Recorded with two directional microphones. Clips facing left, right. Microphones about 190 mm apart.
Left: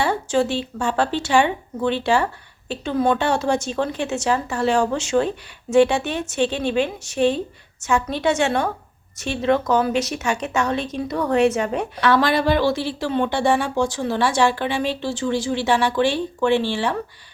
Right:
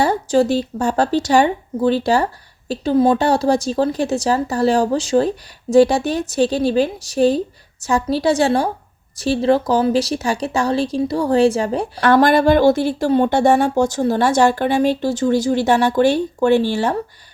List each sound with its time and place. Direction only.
0.0 s speech: 40° right (ahead or behind)
11.9 s speech: 50° right (ahead or behind)